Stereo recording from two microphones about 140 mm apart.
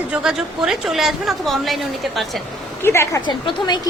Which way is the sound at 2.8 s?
20° left (ahead or behind).